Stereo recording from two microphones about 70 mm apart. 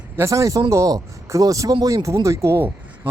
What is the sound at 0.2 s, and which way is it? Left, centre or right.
Speech, right.